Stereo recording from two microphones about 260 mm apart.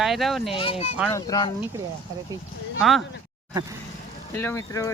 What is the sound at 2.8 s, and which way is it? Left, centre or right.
Speech, centre.